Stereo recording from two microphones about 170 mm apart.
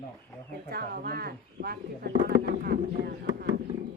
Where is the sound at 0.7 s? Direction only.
65° right (ahead or behind).